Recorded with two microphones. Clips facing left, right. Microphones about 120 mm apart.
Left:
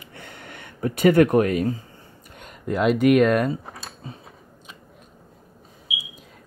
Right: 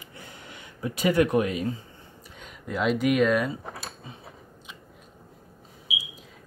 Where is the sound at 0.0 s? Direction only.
65° left (ahead or behind); by 2.9 s 50° left (ahead or behind).